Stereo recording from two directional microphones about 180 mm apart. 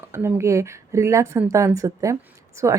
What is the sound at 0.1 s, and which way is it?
Speech, 15° right (ahead or behind).